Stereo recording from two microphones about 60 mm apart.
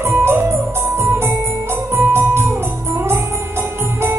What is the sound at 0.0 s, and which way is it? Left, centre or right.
Music, right.